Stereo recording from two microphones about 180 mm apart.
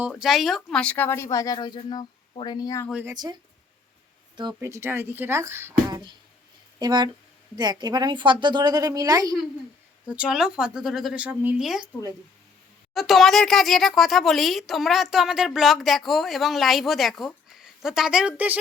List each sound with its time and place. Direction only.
0.1 s speech: centre (ahead or behind); by 2.9 s 15° left (ahead or behind)
2.9 s speech: 10° right (ahead or behind)
4.4 s a woman's voice: 20° right (ahead or behind)
10.1 s speech: 5° right (ahead or behind)
12.9 s speech: centre (ahead or behind)